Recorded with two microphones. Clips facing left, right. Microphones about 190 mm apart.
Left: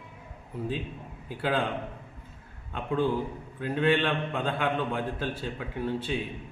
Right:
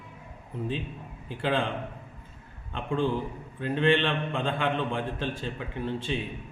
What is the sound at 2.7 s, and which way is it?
A man's voice, 5° left (ahead or behind).